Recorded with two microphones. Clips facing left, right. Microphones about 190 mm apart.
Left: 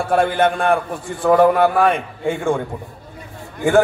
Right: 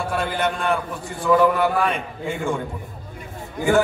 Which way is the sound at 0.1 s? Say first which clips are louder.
Left 10 dB; 50° left (ahead or behind).